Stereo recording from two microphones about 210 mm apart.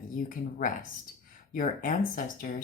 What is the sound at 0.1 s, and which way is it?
Speech, 40° left (ahead or behind).